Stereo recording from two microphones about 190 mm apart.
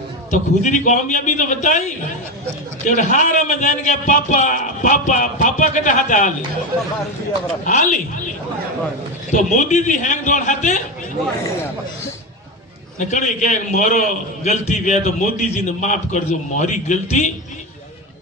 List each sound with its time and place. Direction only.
0.3 s a man's voice: 40° left (ahead or behind)
7.6 s a man's voice: 40° left (ahead or behind)
9.3 s a man's voice: 40° left (ahead or behind)
13.1 s a man's voice: 40° left (ahead or behind)